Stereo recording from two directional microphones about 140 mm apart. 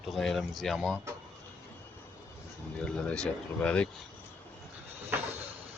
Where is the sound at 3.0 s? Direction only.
5° left (ahead or behind).